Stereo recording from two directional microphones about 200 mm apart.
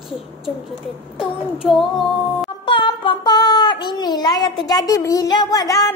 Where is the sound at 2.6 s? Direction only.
25° left (ahead or behind).